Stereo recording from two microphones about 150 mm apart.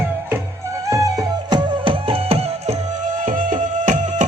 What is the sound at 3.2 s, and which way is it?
Music, 65° right (ahead or behind).